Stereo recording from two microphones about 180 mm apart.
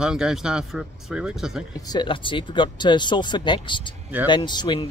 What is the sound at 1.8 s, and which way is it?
Speech, 25° left (ahead or behind).